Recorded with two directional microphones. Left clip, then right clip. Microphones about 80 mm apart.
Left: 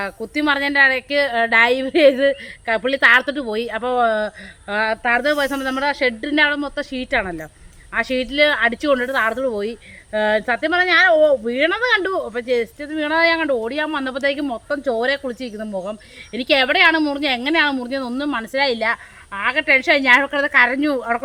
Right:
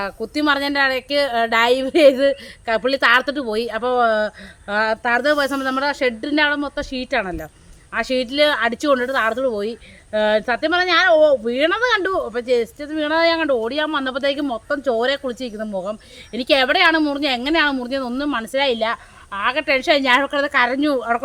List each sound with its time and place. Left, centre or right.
0.0 s speech: centre
9.0 s speech: centre